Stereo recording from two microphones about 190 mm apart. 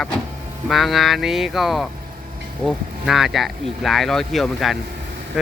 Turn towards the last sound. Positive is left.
turn(degrees=0)  # may be behind; listen again after turning